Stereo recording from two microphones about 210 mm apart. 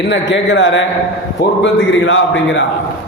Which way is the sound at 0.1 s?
60° left (ahead or behind).